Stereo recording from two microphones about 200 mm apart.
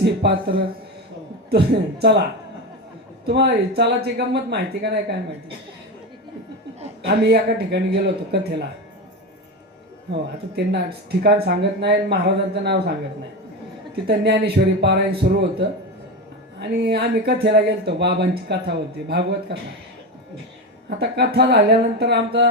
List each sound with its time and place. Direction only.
0.0 s speech: 55° right (ahead or behind)
3.2 s speech: 55° right (ahead or behind)
7.0 s speech: 50° right (ahead or behind)
10.1 s speech: 55° right (ahead or behind)
13.9 s speech: 55° right (ahead or behind)
21.0 s speech: 55° right (ahead or behind)